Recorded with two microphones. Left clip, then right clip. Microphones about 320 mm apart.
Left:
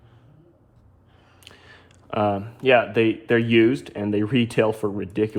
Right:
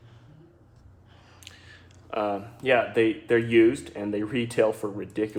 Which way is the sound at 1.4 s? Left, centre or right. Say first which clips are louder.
Left 2 dB; centre.